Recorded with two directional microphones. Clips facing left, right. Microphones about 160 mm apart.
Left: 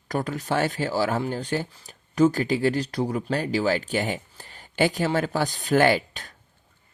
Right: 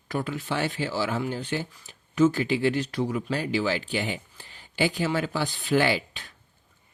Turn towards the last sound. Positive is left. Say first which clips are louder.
# left 5 dB
turn(degrees=45)  # may be behind; listen again after turning